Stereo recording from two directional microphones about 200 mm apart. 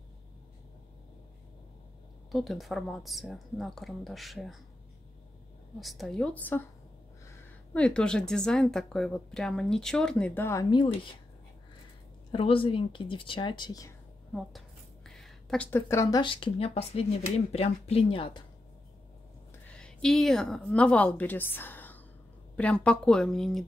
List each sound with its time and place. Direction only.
2.3 s a woman's voice: centre (ahead or behind)
5.8 s a woman's voice: centre (ahead or behind); by 11.0 s 25° left (ahead or behind)
12.3 s speech: 25° left (ahead or behind)
15.0 s speech: centre (ahead or behind); by 18.4 s 25° left (ahead or behind)
19.7 s a woman's voice: 5° left (ahead or behind)